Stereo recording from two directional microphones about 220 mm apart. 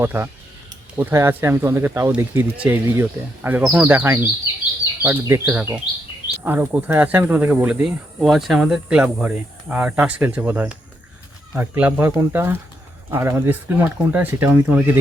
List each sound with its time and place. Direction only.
0.0 s speech: 10° right (ahead or behind)